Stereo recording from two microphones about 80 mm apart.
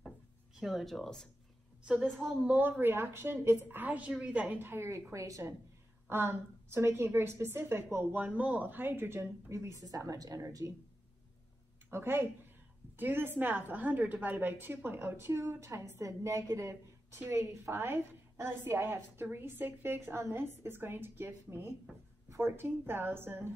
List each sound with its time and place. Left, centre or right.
0.6 s speech: centre
2.4 s a woman's voice: right
3.6 s a woman's voice: right
6.0 s a woman's voice: right
11.9 s a woman's voice: right